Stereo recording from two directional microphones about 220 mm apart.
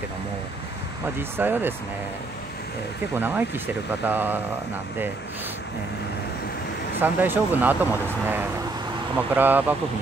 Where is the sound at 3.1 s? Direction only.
10° right (ahead or behind).